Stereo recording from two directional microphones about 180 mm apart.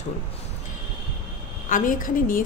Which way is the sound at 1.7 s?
45° left (ahead or behind).